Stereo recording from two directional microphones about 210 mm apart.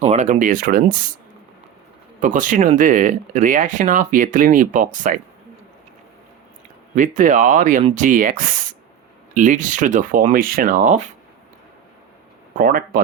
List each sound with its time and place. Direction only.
0.0 s speech: 35° right (ahead or behind)
2.2 s speech: 40° right (ahead or behind)
6.9 s speech: 35° right (ahead or behind)
12.5 s speech: 40° right (ahead or behind)